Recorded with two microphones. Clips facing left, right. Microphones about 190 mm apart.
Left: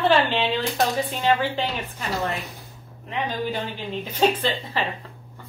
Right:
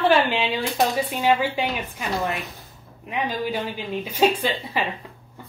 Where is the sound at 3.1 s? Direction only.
10° right (ahead or behind).